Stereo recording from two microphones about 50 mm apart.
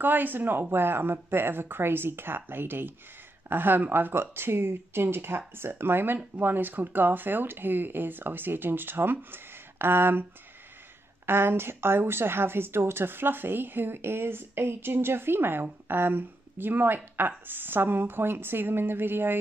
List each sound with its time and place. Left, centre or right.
0.0 s speech: right
11.2 s speech: right